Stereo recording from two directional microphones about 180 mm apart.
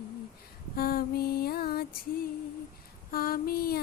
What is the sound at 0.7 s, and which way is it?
Female singing, 55° left (ahead or behind).